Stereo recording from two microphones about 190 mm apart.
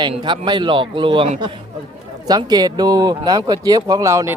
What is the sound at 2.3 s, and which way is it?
A man's voice, 20° right (ahead or behind).